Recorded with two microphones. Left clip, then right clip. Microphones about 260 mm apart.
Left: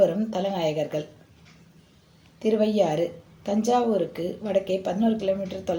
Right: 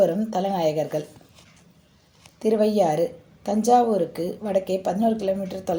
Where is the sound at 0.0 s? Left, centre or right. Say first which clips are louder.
Right 1 dB; right.